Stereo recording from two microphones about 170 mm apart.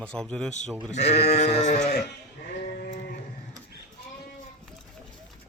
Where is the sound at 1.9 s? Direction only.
65° left (ahead or behind).